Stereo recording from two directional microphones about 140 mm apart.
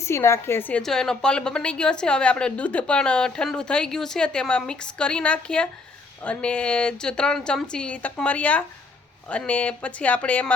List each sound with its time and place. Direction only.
0.0 s a woman's voice: 20° left (ahead or behind)
0.8 s a woman's voice: 5° left (ahead or behind)